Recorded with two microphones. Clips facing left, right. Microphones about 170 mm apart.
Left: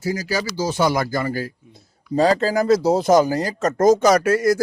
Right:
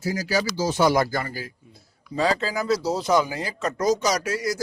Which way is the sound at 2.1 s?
45° left (ahead or behind).